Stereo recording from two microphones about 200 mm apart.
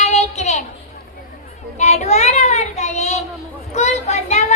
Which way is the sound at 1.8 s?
35° left (ahead or behind).